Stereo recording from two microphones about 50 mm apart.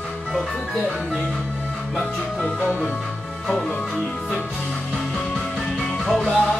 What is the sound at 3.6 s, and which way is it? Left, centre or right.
Music, left.